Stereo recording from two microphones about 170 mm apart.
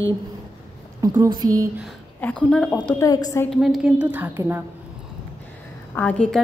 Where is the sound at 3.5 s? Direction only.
Centre (ahead or behind).